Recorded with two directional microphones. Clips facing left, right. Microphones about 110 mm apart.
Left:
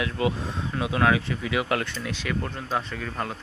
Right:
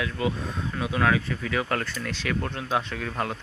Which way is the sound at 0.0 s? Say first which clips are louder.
Left 2 dB; 20° left (ahead or behind).